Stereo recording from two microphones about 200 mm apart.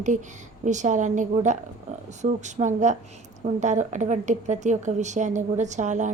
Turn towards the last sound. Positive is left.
turn(degrees=-35)  # may be behind; listen again after turning